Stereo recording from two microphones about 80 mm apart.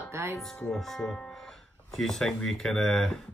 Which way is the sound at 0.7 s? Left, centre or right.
Centre.